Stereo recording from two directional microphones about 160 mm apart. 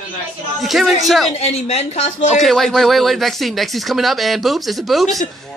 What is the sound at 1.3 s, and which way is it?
Speech, 45° left (ahead or behind).